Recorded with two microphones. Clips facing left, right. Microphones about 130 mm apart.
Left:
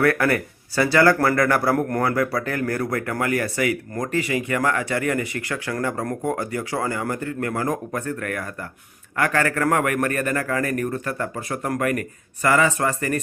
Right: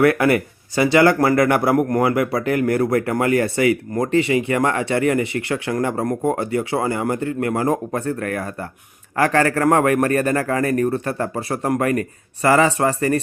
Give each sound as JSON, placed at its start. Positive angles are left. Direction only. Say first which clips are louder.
{"t": 0.0, "sound": "a man's voice", "louder": "right 4 dB", "side_deg": -20}